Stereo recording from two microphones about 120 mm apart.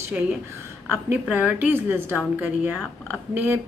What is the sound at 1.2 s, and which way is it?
Speech, 10° right (ahead or behind).